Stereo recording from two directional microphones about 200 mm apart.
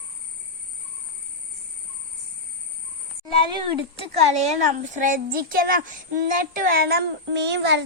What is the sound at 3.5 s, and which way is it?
A child's voice, 25° right (ahead or behind).